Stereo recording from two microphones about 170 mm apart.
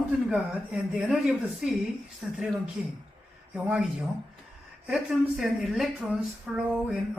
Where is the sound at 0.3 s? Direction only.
5° right (ahead or behind).